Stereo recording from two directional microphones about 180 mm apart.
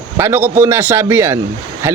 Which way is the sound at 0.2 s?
10° right (ahead or behind).